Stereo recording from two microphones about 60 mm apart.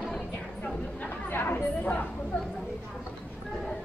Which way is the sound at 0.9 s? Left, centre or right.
Left.